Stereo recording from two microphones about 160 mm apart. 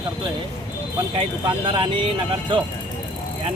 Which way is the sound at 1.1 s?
30° right (ahead or behind).